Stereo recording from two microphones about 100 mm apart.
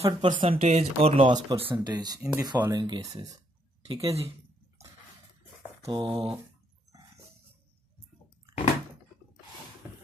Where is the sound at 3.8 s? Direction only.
90° right.